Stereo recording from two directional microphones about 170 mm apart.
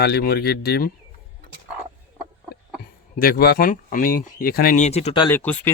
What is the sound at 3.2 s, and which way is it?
Speech, 60° left (ahead or behind).